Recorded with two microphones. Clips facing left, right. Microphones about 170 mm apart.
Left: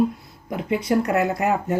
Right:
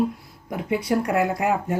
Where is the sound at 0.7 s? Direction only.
10° right (ahead or behind).